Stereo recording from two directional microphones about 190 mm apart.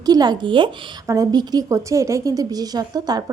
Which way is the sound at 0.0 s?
20° right (ahead or behind).